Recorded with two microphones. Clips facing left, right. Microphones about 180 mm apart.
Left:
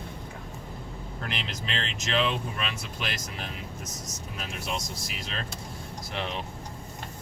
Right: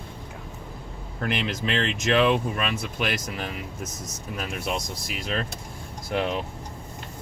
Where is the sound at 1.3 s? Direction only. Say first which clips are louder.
Right 9 dB; 55° right (ahead or behind).